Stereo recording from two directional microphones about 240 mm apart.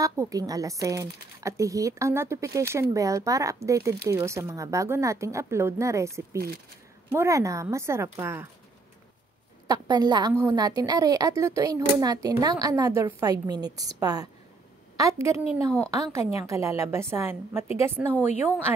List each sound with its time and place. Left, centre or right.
0.0 s a woman's voice: centre
6.3 s speech: right
7.1 s a woman's voice: centre
9.7 s a woman's voice: centre